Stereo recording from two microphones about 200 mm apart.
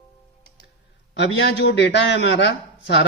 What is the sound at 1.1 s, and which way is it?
A man's voice, 60° left (ahead or behind).